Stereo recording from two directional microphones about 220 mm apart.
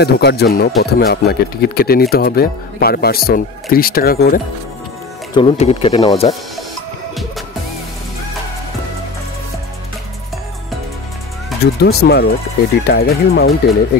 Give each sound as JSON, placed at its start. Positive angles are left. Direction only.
{"t": 0.0, "sound": "speech", "side_deg": 50}
{"t": 5.3, "sound": "speech", "side_deg": 25}
{"t": 11.6, "sound": "speech", "side_deg": 45}